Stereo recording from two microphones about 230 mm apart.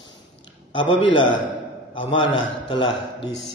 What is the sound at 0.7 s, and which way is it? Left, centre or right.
A man's voice, left.